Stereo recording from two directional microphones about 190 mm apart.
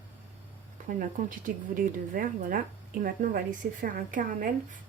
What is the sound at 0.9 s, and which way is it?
Speech, 45° right (ahead or behind).